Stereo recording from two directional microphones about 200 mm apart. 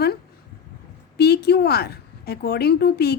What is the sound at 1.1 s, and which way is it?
A woman's voice, 55° left (ahead or behind).